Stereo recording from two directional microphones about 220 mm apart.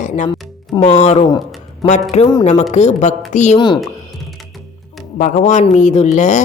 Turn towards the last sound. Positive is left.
turn(degrees=35)  # may be behind; listen again after turning